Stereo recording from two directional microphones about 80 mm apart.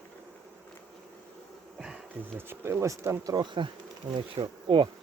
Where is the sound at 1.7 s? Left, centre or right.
Centre.